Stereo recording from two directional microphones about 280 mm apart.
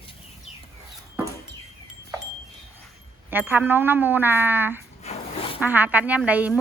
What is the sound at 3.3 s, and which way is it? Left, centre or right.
A child's voice, centre.